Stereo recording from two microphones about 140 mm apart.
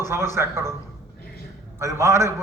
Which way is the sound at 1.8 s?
20° right (ahead or behind).